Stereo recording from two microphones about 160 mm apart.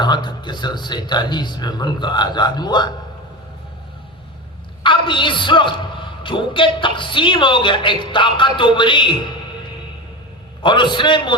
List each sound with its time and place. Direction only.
0.0 s speech: 30° left (ahead or behind)
4.8 s a man's voice: 30° left (ahead or behind)
10.6 s a man's voice: 30° left (ahead or behind)